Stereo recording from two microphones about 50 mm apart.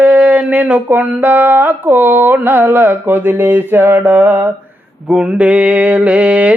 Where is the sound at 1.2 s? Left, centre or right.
Right.